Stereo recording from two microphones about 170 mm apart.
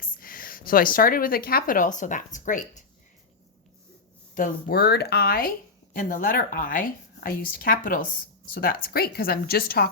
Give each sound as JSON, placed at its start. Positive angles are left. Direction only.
{"t": 0.0, "sound": "speech", "side_deg": 55}
{"t": 4.4, "sound": "speech", "side_deg": 60}